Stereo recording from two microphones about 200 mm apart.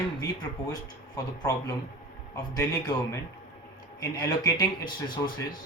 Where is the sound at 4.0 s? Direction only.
20° left (ahead or behind).